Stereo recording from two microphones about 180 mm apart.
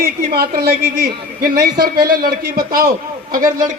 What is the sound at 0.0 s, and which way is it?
A man's voice, 60° right (ahead or behind).